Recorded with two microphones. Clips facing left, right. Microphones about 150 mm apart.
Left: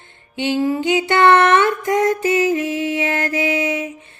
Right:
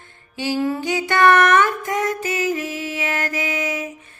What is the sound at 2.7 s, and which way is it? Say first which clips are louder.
Mantra: left 5 dB; 30° left (ahead or behind).